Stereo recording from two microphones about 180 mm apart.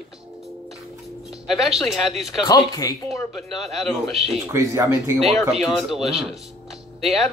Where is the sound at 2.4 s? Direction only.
20° left (ahead or behind).